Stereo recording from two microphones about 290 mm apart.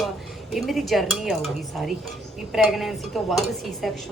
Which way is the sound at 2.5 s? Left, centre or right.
Centre.